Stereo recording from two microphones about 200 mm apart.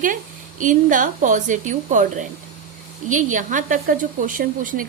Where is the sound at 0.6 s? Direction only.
40° right (ahead or behind).